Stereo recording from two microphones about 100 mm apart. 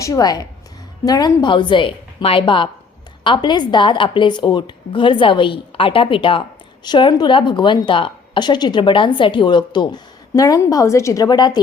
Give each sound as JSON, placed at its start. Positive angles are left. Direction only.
{"t": 0.0, "sound": "a woman's voice", "side_deg": 35}
{"t": 3.2, "sound": "speech", "side_deg": 50}
{"t": 6.8, "sound": "a woman's voice", "side_deg": 50}